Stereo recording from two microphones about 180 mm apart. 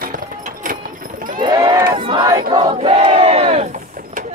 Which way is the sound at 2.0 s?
25° right (ahead or behind).